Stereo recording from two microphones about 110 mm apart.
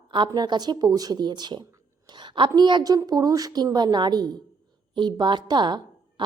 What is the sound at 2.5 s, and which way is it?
A woman's voice, 40° right (ahead or behind).